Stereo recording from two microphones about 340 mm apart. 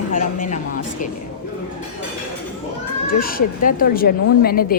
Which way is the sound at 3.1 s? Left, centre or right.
Left.